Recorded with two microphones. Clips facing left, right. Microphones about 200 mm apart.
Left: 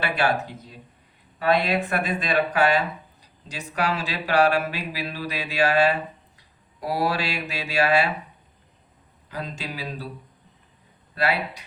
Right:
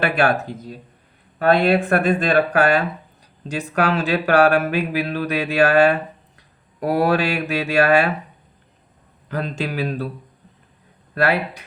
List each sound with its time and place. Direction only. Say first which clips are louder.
0.0 s speech: right 5 dB; 50° right (ahead or behind)
1.8 s speech: right 8 dB; 50° right (ahead or behind)
9.3 s speech: right 8 dB; 60° right (ahead or behind)
11.1 s speech: right 5 dB; 55° right (ahead or behind)